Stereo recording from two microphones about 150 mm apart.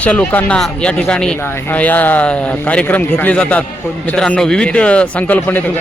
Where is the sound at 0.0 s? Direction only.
10° left (ahead or behind).